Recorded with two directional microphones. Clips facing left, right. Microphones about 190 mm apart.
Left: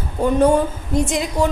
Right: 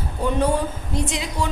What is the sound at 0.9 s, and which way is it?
Speech, 45° left (ahead or behind).